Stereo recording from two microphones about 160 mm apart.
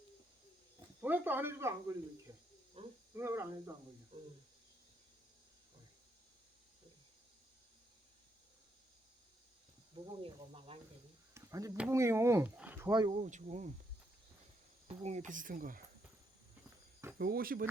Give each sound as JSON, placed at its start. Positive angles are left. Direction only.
{"t": 1.0, "sound": "speech", "side_deg": -10}
{"t": 2.8, "sound": "speech", "side_deg": -35}
{"t": 3.2, "sound": "speech", "side_deg": -15}
{"t": 9.9, "sound": "speech", "side_deg": -35}
{"t": 11.3, "sound": "a sound", "side_deg": -20}
{"t": 11.9, "sound": "speech", "side_deg": -15}
{"t": 13.1, "sound": "speech", "side_deg": -50}
{"t": 14.8, "sound": "speech", "side_deg": -45}
{"t": 17.2, "sound": "speech", "side_deg": -70}